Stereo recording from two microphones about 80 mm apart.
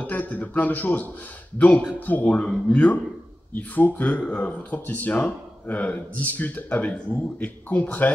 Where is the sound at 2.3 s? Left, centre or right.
Centre.